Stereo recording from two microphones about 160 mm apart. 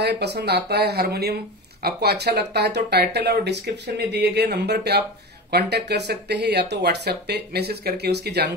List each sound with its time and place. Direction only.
0.0 s speech: 90° right